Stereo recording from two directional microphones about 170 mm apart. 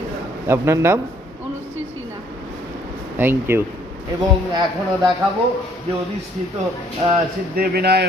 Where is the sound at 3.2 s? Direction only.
15° right (ahead or behind).